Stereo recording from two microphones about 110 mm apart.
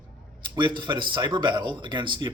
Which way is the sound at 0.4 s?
45° right (ahead or behind).